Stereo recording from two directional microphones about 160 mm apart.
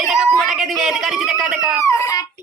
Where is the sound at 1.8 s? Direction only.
20° left (ahead or behind).